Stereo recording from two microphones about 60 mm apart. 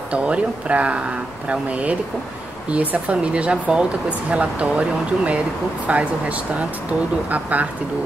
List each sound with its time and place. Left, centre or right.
0.1 s speech: right